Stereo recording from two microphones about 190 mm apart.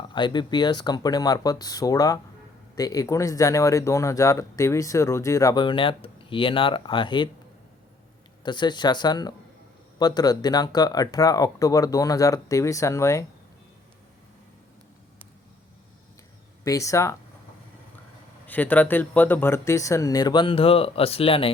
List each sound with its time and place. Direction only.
0.1 s speech: 25° left (ahead or behind)
8.4 s speech: 25° left (ahead or behind)
16.6 s speech: 15° left (ahead or behind)
18.4 s speech: 10° left (ahead or behind); by 21.5 s 30° left (ahead or behind)